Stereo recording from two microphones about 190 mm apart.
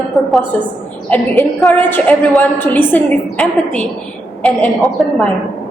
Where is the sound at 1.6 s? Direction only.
5° left (ahead or behind).